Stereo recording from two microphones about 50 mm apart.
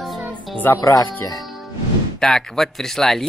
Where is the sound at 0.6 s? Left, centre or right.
Left.